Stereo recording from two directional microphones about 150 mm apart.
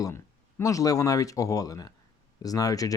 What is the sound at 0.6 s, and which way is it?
Speech, 20° left (ahead or behind).